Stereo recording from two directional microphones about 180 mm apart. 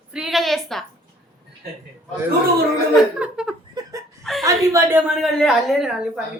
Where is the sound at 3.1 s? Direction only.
5° right (ahead or behind).